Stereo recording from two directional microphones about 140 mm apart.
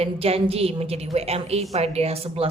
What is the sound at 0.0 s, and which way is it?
A woman's voice, 45° right (ahead or behind).